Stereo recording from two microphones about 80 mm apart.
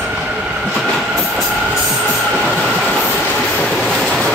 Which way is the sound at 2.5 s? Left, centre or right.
Centre.